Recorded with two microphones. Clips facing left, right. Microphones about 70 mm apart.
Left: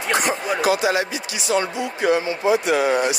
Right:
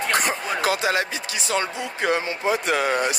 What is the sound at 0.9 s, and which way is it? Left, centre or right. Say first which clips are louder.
Speech: left 2 dB; right.